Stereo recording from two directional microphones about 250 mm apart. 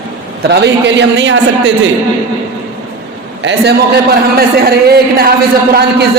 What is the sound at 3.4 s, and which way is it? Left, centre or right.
A man's voice, right.